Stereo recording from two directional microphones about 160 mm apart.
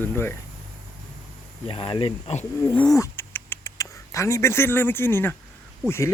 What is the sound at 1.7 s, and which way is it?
Speech, 35° left (ahead or behind).